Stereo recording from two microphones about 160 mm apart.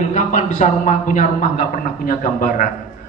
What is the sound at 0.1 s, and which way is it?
A man's voice, 50° left (ahead or behind).